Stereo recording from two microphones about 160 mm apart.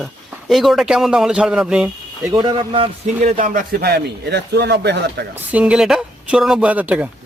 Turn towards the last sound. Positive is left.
turn(degrees=-10)  # may be behind; listen again after turning